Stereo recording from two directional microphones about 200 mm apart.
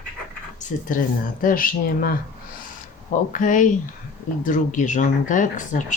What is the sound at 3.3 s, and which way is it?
Speech, 40° left (ahead or behind).